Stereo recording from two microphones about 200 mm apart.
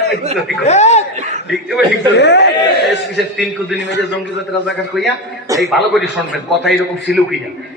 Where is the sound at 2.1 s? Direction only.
60° left (ahead or behind).